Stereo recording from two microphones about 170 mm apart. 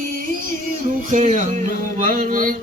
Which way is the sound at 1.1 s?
50° right (ahead or behind).